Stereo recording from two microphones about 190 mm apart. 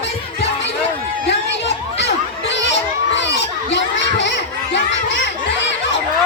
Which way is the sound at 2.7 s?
70° left (ahead or behind).